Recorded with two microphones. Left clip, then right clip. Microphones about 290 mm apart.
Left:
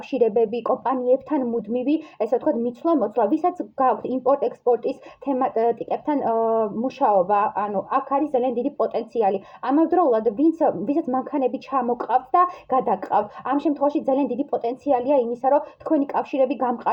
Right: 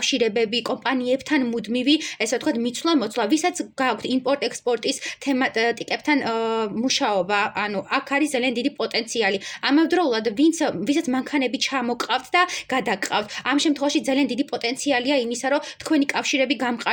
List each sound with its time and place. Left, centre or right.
0.2 s speech: right